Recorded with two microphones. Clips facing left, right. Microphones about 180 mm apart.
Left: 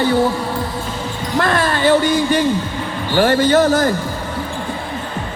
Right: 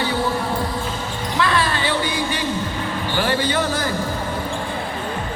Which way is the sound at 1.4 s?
50° left (ahead or behind).